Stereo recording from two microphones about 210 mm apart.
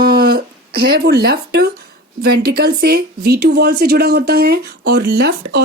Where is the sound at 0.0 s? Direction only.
45° right (ahead or behind).